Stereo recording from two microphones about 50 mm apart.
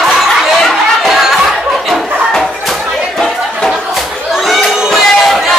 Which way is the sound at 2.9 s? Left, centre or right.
Centre.